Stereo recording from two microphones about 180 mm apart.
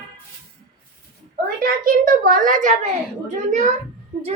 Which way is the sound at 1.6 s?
50° right (ahead or behind).